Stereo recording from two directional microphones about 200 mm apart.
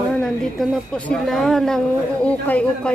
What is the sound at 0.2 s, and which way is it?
A woman's voice, 5° left (ahead or behind).